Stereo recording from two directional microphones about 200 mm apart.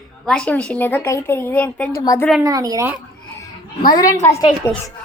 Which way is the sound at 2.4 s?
15° right (ahead or behind).